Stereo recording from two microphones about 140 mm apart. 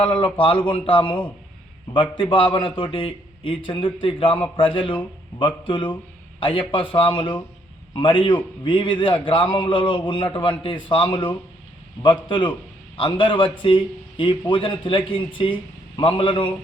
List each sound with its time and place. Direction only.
0.0 s a man's voice: 40° left (ahead or behind)